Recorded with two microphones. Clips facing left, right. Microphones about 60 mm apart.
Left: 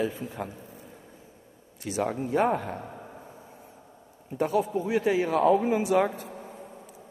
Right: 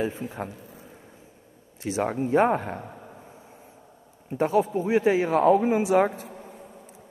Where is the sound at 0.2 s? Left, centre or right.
Right.